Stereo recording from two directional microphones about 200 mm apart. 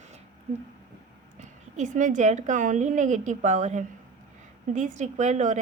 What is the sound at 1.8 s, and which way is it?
A woman's voice, 40° right (ahead or behind).